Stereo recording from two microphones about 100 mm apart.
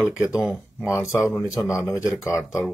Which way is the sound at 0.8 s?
30° left (ahead or behind).